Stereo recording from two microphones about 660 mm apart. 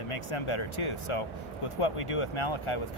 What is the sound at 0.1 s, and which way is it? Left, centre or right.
Speech, left.